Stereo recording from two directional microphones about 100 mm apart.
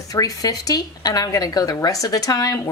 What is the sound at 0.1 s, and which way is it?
A woman's voice, 35° left (ahead or behind).